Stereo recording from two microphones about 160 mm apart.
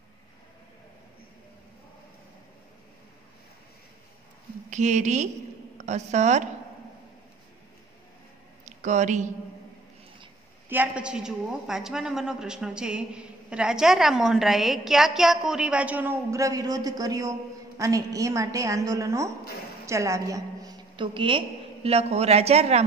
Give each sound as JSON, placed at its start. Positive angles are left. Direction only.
{"t": 4.6, "sound": "a woman's voice", "side_deg": -50}
{"t": 8.6, "sound": "speech", "side_deg": -50}
{"t": 10.7, "sound": "a woman's voice", "side_deg": -10}